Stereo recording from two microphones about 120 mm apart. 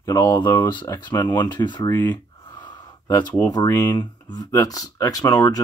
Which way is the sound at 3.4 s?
30° left (ahead or behind).